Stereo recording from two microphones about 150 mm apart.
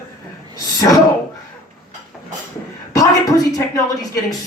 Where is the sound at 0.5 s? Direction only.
25° left (ahead or behind).